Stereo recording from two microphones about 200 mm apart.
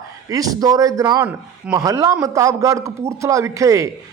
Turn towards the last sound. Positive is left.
turn(degrees=-15)  # may be behind; listen again after turning